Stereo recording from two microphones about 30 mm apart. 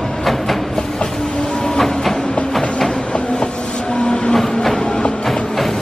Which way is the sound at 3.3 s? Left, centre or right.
Left.